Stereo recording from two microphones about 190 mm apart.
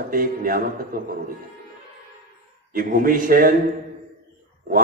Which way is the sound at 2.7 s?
50° right (ahead or behind).